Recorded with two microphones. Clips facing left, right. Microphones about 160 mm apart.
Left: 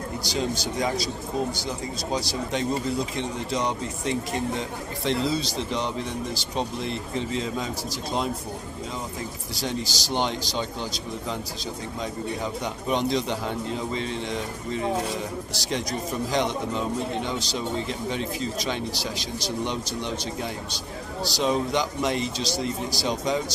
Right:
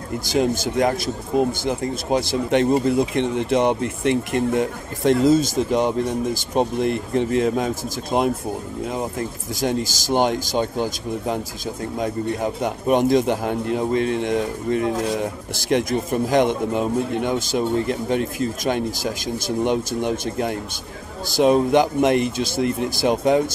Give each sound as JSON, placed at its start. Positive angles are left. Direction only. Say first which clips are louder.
{"t": 0.2, "sound": "a man's voice", "louder": "right 9 dB", "side_deg": -50}